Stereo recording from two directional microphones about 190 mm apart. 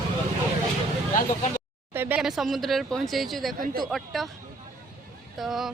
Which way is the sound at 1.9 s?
10° right (ahead or behind).